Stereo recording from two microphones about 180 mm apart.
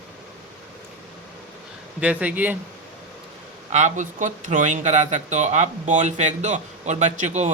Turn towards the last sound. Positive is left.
turn(degrees=-40)  # may be behind; listen again after turning